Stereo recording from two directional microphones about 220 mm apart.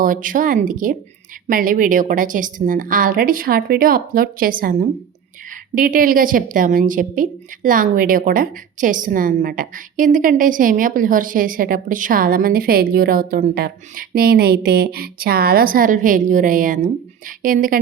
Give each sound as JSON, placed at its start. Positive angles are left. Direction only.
{"t": 0.0, "sound": "a woman's voice", "side_deg": -40}